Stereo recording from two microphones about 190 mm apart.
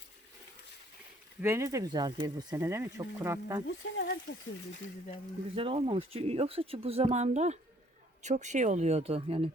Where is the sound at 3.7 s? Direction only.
70° left (ahead or behind).